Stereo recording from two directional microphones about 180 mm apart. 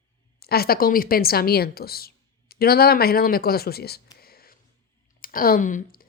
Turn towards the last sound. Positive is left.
turn(degrees=50)  # may be behind; listen again after turning